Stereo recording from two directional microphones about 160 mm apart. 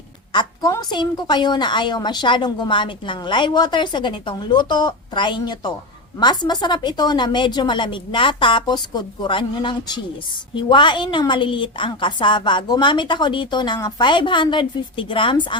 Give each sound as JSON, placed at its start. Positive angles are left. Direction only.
{"t": 0.3, "sound": "a woman's voice", "side_deg": 25}